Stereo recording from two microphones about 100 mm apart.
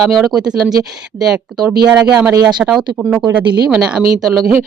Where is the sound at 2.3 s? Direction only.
45° right (ahead or behind).